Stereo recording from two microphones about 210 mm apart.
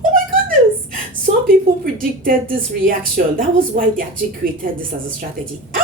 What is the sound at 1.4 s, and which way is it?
A woman's voice, 40° right (ahead or behind).